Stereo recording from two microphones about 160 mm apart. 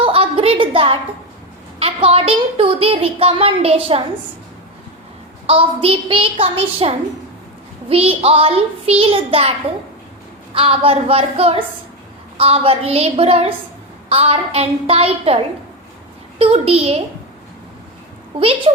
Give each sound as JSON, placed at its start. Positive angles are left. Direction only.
{"t": 0.0, "sound": "a sound", "side_deg": -35}
{"t": 1.8, "sound": "a woman's voice", "side_deg": -35}
{"t": 5.5, "sound": "a woman's voice", "side_deg": -35}
{"t": 16.4, "sound": "a woman's voice", "side_deg": -40}
{"t": 18.3, "sound": "a woman's voice", "side_deg": -35}